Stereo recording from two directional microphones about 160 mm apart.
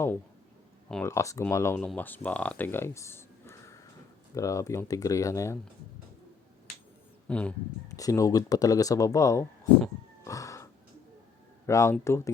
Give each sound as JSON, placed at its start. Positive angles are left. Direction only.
{"t": 1.0, "sound": "speech", "side_deg": 20}
{"t": 7.3, "sound": "speech", "side_deg": 10}
{"t": 7.9, "sound": "speech", "side_deg": 20}
{"t": 10.2, "sound": "music", "side_deg": 20}
{"t": 11.6, "sound": "speech", "side_deg": 20}